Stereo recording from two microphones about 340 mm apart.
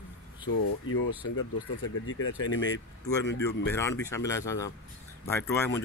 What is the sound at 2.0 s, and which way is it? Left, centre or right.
Speech, left.